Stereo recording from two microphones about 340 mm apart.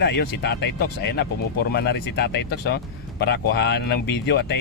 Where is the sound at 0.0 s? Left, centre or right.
Left.